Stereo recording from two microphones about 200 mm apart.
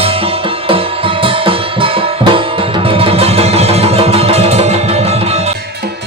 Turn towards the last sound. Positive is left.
turn(degrees=-30)  # may be behind; listen again after turning